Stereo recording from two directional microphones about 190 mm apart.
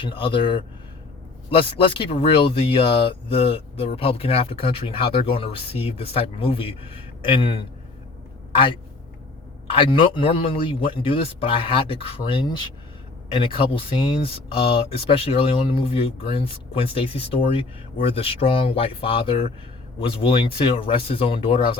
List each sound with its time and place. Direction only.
0.0 s speech: 25° left (ahead or behind)
9.8 s speech: 25° left (ahead or behind)